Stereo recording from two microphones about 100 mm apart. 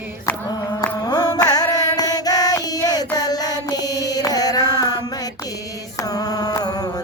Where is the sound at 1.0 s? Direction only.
40° left (ahead or behind).